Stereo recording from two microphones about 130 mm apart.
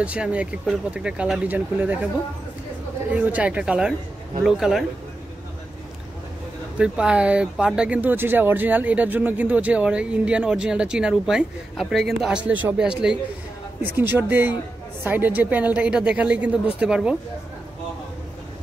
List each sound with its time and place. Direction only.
0.0 s speech: 10° right (ahead or behind)
3.1 s a man's voice: 10° right (ahead or behind)
6.8 s speech: 10° right (ahead or behind)